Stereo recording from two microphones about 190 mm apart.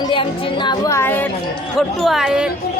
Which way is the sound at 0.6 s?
15° left (ahead or behind).